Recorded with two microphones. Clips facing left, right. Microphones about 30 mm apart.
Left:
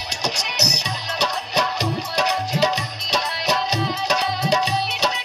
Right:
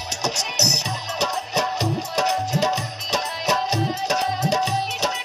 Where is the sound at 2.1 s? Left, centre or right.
Left.